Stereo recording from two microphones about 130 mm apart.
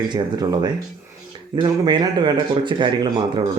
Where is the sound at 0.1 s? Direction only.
30° right (ahead or behind).